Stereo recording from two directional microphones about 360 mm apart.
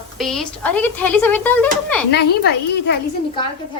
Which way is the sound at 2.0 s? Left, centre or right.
Left.